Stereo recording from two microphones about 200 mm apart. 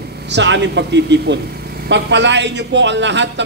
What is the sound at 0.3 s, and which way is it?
A man's voice, 60° right (ahead or behind).